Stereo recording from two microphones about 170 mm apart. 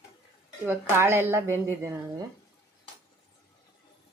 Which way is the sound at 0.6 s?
15° right (ahead or behind).